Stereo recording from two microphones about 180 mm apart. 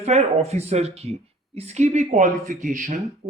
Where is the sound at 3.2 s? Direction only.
40° right (ahead or behind).